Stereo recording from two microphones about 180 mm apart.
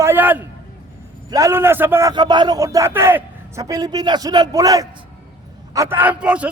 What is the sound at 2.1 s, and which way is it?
A man's voice, 25° right (ahead or behind).